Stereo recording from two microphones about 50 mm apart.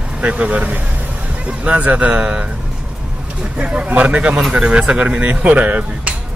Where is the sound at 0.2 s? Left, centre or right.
Right.